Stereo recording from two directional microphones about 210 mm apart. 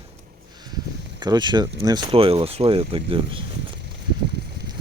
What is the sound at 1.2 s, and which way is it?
Speech, 20° right (ahead or behind).